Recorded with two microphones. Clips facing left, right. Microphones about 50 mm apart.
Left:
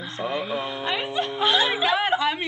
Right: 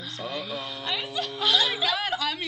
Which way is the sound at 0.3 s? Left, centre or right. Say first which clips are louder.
Left 6 dB; left.